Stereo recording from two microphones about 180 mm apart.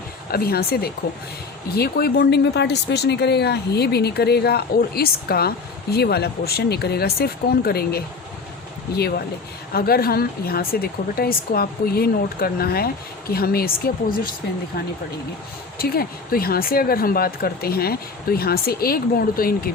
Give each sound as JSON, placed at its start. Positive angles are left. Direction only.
{"t": 0.3, "sound": "speech", "side_deg": 60}
{"t": 15.8, "sound": "speech", "side_deg": 55}